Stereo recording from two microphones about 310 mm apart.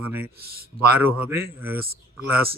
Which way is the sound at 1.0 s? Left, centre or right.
Centre.